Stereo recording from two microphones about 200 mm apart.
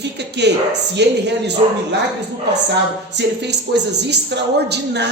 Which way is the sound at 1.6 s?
30° right (ahead or behind).